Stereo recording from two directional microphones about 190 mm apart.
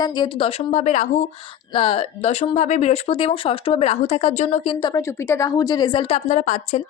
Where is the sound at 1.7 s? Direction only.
30° left (ahead or behind).